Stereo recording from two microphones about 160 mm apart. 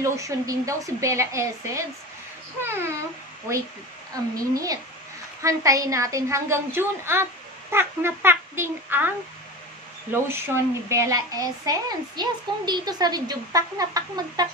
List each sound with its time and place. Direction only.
0.0 s a child's voice: 20° right (ahead or behind)
4.4 s a child's voice: 20° right (ahead or behind)
10.1 s speech: 15° right (ahead or behind)